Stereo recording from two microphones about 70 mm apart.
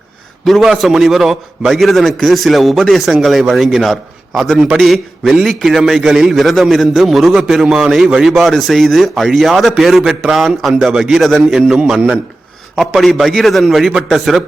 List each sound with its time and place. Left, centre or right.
0.4 s a man's voice: centre
11.9 s a man's voice: right
12.7 s a man's voice: centre